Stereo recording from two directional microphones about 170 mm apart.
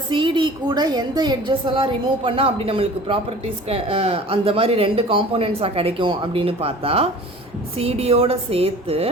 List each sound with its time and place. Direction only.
0.1 s a woman's voice: 30° right (ahead or behind)